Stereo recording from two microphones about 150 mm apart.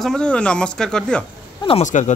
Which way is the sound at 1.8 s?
55° left (ahead or behind).